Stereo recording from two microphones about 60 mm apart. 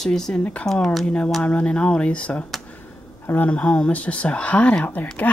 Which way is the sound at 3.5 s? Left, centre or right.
Left.